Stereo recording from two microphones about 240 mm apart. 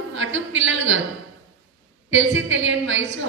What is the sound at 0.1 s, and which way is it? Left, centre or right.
Speech, right.